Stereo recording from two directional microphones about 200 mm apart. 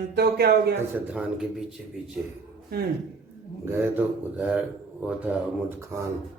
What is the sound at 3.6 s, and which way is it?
Speech, 10° right (ahead or behind).